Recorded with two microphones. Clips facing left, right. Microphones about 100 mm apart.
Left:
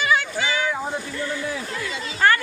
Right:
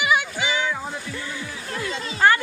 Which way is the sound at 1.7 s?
20° right (ahead or behind).